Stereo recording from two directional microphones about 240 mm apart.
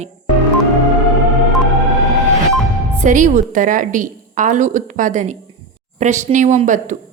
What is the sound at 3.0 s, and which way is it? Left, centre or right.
A woman's voice, right.